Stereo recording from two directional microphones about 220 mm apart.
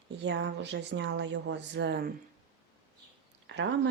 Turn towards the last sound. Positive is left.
turn(degrees=-50)  # may be behind; listen again after turning